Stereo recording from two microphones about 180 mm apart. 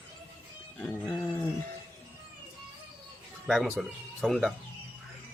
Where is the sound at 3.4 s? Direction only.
Centre (ahead or behind).